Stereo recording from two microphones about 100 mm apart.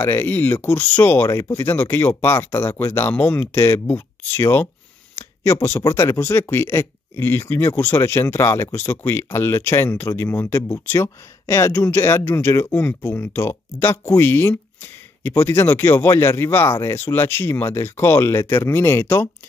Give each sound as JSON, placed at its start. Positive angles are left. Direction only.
{"t": 0.0, "sound": "speech", "side_deg": 20}
{"t": 5.1, "sound": "a sound", "side_deg": 25}
{"t": 5.9, "sound": "speech", "side_deg": 25}